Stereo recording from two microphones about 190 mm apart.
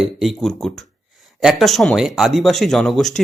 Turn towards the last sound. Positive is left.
turn(degrees=0)  # may be behind; listen again after turning